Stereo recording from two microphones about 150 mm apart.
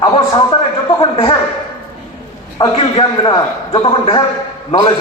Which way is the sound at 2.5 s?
30° left (ahead or behind).